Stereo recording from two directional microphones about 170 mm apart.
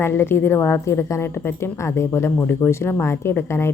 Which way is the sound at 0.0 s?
10° left (ahead or behind).